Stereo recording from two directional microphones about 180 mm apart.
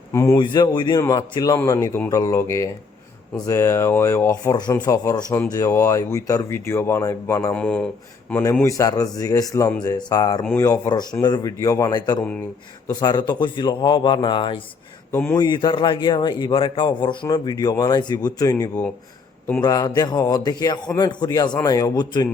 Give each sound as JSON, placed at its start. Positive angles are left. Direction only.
{"t": 0.1, "sound": "a man's voice", "side_deg": 15}
{"t": 15.1, "sound": "speech", "side_deg": 10}
{"t": 15.4, "sound": "a man's voice", "side_deg": 25}